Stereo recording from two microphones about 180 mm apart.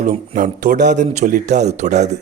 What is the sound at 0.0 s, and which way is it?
Speech, 45° right (ahead or behind).